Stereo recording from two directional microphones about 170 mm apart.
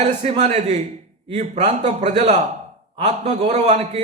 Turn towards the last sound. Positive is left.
turn(degrees=-40)  # may be behind; listen again after turning